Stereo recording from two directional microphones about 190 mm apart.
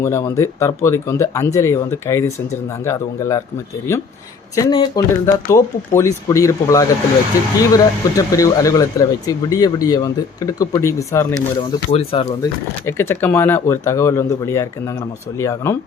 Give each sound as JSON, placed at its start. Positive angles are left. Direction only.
{"t": 0.0, "sound": "speech", "side_deg": 15}
{"t": 11.9, "sound": "speech", "side_deg": 30}
{"t": 12.4, "sound": "speech", "side_deg": 15}